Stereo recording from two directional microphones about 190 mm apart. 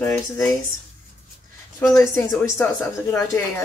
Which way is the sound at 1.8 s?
15° left (ahead or behind).